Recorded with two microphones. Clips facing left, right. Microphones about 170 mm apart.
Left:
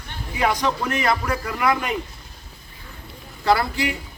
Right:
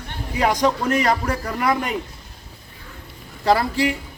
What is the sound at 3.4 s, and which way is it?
Speech, 35° right (ahead or behind).